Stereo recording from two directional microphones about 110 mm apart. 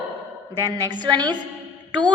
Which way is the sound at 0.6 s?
35° right (ahead or behind).